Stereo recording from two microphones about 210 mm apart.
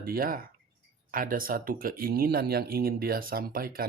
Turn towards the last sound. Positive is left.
turn(degrees=-45)  # may be behind; listen again after turning